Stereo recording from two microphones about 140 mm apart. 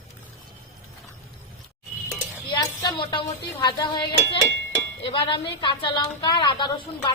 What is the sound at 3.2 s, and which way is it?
A woman's voice, 30° left (ahead or behind).